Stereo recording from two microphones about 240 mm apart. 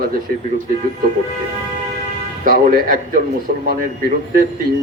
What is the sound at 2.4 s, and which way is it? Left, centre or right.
Speech, right.